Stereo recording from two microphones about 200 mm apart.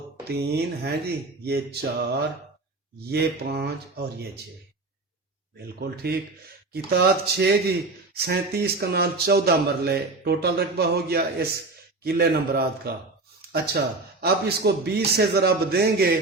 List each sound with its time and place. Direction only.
0.3 s speech: 55° right (ahead or behind)
5.6 s speech: 50° right (ahead or behind)